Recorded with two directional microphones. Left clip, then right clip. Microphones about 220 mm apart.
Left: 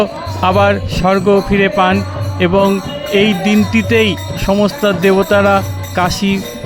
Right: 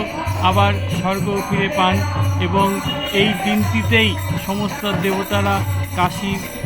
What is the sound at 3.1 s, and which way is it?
Speech, 45° left (ahead or behind).